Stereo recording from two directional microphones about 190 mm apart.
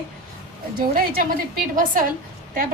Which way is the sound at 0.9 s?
45° right (ahead or behind).